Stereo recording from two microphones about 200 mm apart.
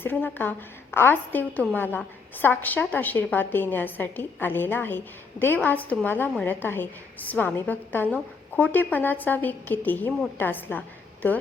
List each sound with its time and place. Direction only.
0.0 s a woman's voice: 10° left (ahead or behind)